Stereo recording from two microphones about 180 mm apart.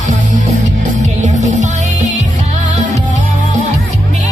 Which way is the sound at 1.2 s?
45° right (ahead or behind).